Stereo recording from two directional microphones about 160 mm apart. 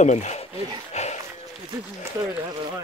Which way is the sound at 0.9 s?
45° left (ahead or behind).